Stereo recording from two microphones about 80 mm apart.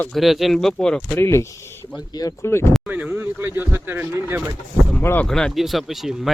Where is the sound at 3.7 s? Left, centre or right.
Right.